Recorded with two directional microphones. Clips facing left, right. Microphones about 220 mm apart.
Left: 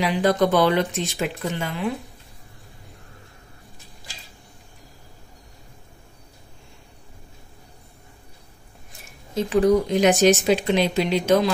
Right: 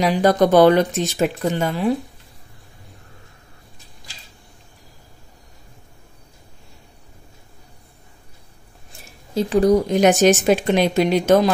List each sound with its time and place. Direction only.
0.0 s speech: 40° right (ahead or behind)
9.3 s speech: 35° right (ahead or behind)